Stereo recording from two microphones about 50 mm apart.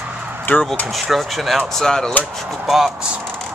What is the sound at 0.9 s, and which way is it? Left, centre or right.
Speech, centre.